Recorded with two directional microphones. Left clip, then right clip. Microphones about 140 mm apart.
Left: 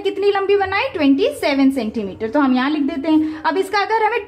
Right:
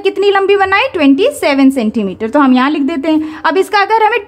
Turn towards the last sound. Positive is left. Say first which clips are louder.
# right 7 dB
turn(degrees=-40)  # may be behind; listen again after turning